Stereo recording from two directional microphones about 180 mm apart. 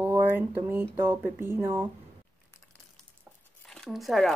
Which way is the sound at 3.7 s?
Centre (ahead or behind).